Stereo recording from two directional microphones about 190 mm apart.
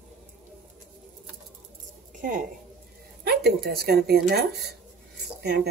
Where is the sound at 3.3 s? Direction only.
55° right (ahead or behind).